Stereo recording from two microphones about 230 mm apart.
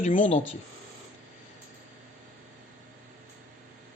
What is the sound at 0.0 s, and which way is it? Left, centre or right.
Speech, left.